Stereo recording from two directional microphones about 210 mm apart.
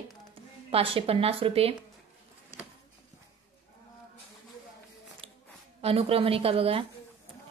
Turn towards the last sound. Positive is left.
turn(degrees=-25)  # may be behind; listen again after turning